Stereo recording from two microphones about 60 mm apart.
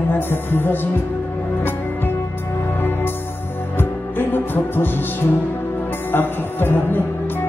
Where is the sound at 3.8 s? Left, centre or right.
Left.